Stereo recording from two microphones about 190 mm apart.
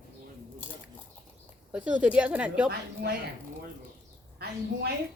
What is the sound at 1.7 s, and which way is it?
A woman's voice, 5° right (ahead or behind).